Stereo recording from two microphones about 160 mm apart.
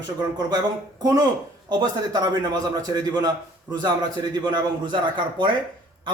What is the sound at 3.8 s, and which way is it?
A man's voice, 25° right (ahead or behind).